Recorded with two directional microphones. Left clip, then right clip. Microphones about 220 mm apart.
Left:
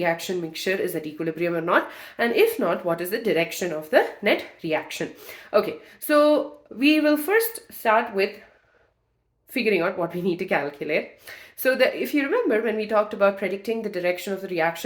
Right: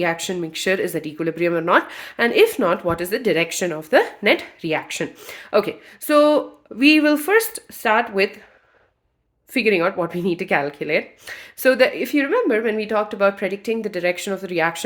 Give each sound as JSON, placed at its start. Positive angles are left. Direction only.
{"t": 0.0, "sound": "speech", "side_deg": -40}
{"t": 9.5, "sound": "speech", "side_deg": -40}